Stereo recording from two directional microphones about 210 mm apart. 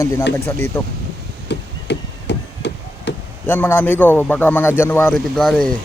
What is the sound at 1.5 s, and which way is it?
Chop, 55° left (ahead or behind).